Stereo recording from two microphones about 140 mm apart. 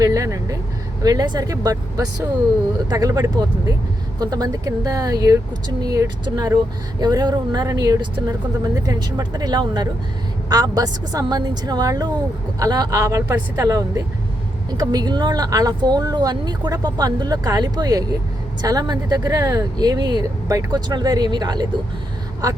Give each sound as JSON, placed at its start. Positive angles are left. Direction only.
{"t": 0.0, "sound": "speech", "side_deg": -25}